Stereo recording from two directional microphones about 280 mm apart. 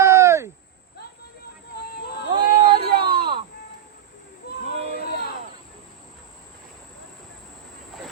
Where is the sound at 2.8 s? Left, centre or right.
Right.